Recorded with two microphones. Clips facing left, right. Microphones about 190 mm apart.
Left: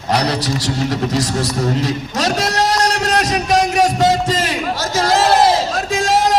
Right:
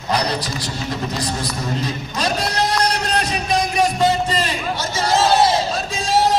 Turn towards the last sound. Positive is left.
turn(degrees=90)